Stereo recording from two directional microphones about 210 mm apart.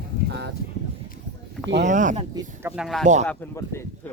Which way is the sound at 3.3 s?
10° left (ahead or behind).